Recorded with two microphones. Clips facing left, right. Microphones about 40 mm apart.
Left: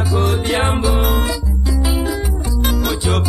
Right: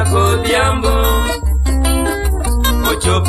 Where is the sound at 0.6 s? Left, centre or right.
Right.